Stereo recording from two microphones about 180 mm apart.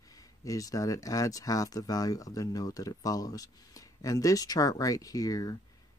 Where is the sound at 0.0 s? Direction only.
20° left (ahead or behind).